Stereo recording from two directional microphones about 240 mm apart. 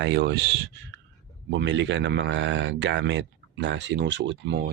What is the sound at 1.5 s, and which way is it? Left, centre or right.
Speech, right.